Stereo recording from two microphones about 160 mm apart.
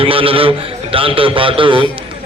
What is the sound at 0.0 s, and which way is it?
A man's voice, 35° right (ahead or behind).